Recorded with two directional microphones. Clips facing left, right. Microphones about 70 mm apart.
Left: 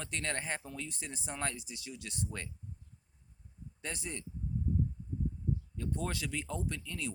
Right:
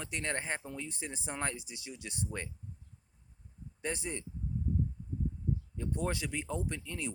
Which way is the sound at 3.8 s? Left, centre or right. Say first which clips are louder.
Right 4 dB; right.